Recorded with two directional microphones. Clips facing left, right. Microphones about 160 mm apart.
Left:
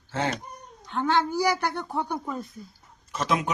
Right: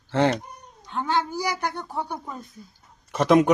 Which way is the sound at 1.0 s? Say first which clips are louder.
Left 2 dB; 15° right (ahead or behind).